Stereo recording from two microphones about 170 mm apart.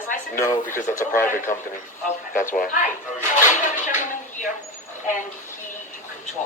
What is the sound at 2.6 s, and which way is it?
Speech, 50° left (ahead or behind).